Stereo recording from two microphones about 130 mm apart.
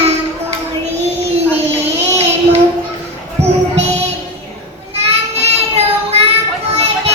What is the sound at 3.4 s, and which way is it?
Music, 55° right (ahead or behind).